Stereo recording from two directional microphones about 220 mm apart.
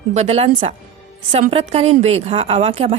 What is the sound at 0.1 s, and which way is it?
A woman's voice, 30° right (ahead or behind).